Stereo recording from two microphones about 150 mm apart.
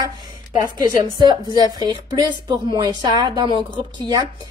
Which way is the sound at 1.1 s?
30° right (ahead or behind).